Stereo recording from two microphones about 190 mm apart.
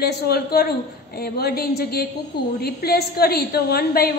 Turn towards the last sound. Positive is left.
turn(degrees=55)  # may be behind; listen again after turning